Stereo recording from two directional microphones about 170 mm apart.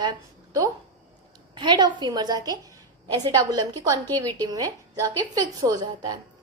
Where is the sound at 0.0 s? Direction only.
25° right (ahead or behind).